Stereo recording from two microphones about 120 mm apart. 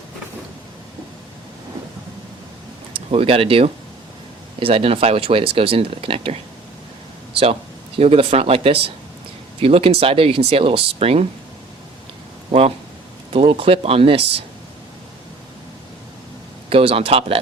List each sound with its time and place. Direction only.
2.9 s speech: 50° right (ahead or behind)
7.9 s speech: 55° right (ahead or behind)
12.5 s speech: 55° right (ahead or behind)
16.6 s speech: 50° right (ahead or behind)